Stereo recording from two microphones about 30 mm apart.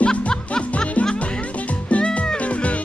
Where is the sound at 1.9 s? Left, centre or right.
Left.